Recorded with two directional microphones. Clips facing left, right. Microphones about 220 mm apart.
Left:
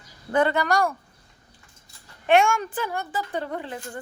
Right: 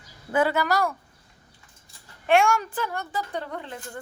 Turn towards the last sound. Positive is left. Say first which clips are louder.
# left 3 dB
turn(degrees=5)  # may be behind; listen again after turning